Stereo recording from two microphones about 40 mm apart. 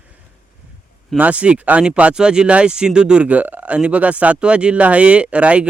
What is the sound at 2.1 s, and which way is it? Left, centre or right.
Speech, right.